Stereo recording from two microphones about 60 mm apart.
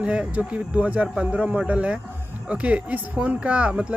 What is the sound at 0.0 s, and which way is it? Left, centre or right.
Speech, centre.